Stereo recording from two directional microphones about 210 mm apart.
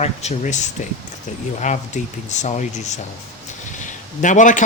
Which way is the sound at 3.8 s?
35° left (ahead or behind).